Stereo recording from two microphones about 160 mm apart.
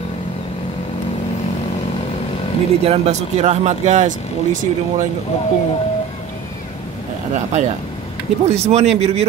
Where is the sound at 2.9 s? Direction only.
45° right (ahead or behind).